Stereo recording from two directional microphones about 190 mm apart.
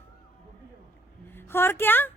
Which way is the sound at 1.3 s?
10° left (ahead or behind).